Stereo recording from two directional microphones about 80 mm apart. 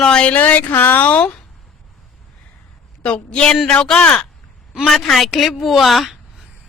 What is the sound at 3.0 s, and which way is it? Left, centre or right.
A woman's voice, centre.